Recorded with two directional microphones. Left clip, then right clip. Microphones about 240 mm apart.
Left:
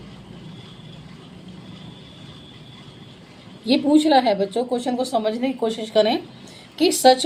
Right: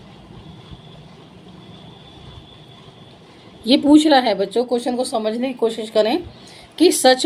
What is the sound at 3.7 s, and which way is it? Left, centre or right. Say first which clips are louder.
A woman's voice: right 4 dB; right.